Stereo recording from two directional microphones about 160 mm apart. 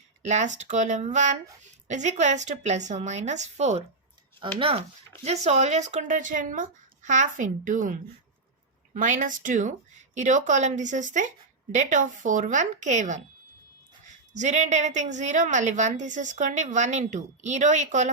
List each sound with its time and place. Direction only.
0.2 s a woman's voice: 45° right (ahead or behind)
4.4 s a woman's voice: 35° right (ahead or behind)